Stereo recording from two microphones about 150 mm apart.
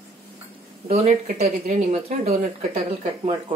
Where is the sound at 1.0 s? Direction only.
55° right (ahead or behind).